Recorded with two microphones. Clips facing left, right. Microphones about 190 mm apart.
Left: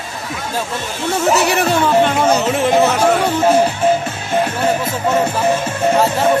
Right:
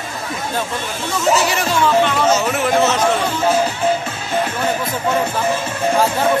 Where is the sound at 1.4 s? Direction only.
60° left (ahead or behind).